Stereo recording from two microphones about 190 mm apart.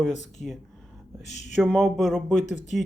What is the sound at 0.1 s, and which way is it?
Speech, 40° left (ahead or behind).